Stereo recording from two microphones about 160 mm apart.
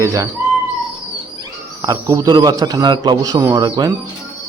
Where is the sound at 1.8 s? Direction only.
25° right (ahead or behind).